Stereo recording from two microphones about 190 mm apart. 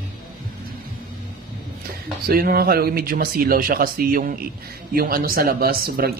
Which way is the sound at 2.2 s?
50° right (ahead or behind).